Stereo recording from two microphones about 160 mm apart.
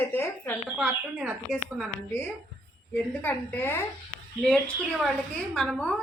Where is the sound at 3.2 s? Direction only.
10° left (ahead or behind).